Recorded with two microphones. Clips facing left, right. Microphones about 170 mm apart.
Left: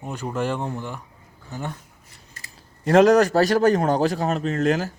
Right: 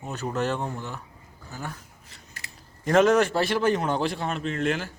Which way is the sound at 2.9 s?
35° left (ahead or behind).